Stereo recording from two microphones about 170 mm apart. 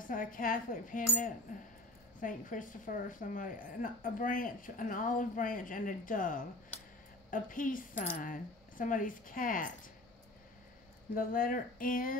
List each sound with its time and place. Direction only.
0.0 s a woman's voice: 50° left (ahead or behind)
11.1 s a woman's voice: 55° left (ahead or behind)